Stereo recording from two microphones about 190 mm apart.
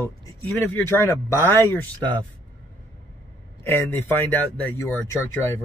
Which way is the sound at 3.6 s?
10° left (ahead or behind).